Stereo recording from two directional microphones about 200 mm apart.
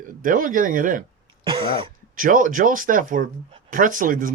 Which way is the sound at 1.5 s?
25° right (ahead or behind).